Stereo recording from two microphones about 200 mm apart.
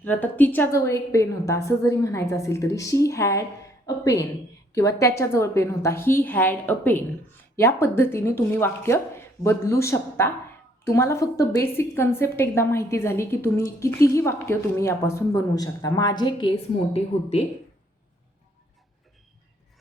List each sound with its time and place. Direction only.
0.0 s a woman's voice: 10° left (ahead or behind); by 17.4 s 30° left (ahead or behind)